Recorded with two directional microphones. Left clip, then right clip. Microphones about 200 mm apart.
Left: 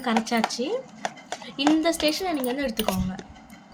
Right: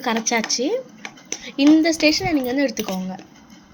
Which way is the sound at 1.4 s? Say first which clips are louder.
Right 7 dB; 15° right (ahead or behind).